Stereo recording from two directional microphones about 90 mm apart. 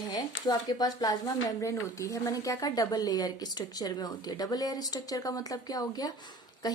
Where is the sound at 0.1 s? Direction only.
50° left (ahead or behind).